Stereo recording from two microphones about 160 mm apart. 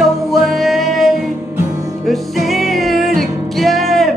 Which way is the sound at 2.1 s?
Centre (ahead or behind).